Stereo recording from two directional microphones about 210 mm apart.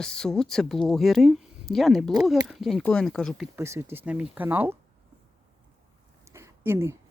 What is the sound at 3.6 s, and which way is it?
Speech, 10° right (ahead or behind).